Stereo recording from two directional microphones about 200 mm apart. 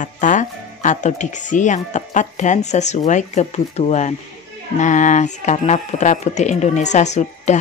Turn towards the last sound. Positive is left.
turn(degrees=35)  # may be behind; listen again after turning